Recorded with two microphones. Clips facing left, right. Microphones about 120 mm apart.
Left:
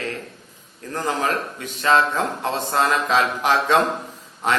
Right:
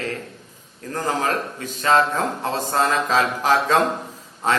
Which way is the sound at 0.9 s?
35° right (ahead or behind).